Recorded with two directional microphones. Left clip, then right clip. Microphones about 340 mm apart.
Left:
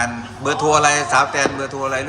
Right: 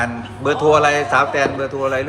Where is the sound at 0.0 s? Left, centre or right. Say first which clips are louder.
Right 1 dB; centre.